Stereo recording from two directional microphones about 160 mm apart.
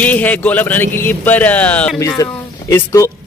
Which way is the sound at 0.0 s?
10° left (ahead or behind).